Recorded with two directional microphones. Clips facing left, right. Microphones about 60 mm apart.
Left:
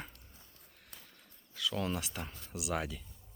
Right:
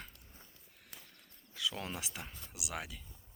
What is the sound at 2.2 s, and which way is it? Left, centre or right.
Speech, centre.